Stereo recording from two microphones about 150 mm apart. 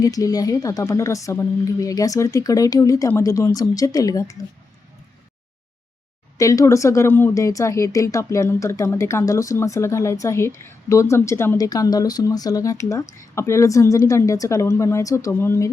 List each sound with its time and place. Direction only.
0.0 s speech: 25° left (ahead or behind)
6.3 s speech: 20° left (ahead or behind)